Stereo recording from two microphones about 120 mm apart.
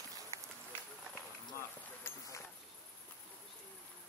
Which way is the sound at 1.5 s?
20° left (ahead or behind).